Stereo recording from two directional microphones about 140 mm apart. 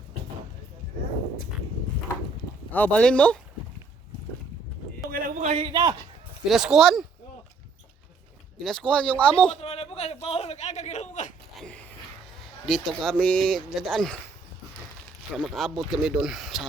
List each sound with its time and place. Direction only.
2.7 s speech: 10° left (ahead or behind)
5.1 s speech: 75° right (ahead or behind)
5.5 s a man's voice: 35° right (ahead or behind)
6.5 s speech: centre (ahead or behind)
8.5 s speech: 5° left (ahead or behind)
9.6 s speech: 45° left (ahead or behind)
11.5 s a sound: 5° left (ahead or behind)
12.6 s speech: 5° left (ahead or behind)
15.4 s speech: centre (ahead or behind)